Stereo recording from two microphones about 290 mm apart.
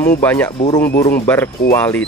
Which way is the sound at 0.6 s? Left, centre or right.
Centre.